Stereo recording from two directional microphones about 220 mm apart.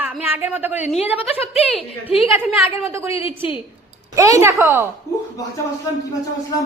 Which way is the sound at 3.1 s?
25° left (ahead or behind).